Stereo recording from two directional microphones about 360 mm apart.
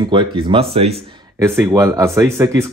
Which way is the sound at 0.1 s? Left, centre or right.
Centre.